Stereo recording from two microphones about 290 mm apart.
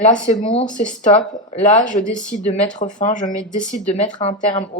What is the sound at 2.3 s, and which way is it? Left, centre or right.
Speech, left.